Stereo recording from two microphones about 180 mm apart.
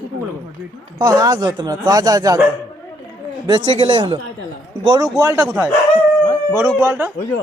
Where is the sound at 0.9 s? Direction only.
20° right (ahead or behind).